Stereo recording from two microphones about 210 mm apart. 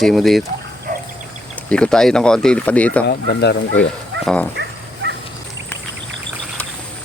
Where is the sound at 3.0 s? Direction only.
55° left (ahead or behind).